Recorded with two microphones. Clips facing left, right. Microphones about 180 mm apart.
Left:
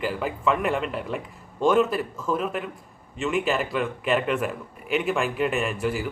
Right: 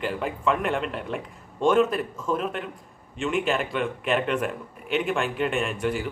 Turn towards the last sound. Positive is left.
turn(degrees=5)  # may be behind; listen again after turning